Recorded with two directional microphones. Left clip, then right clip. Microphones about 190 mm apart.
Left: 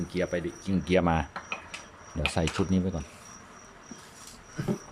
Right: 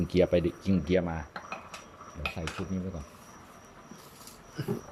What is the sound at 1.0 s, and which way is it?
Speech, 15° left (ahead or behind).